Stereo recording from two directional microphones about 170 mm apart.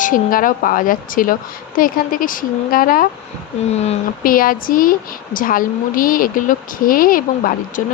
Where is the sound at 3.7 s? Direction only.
40° left (ahead or behind).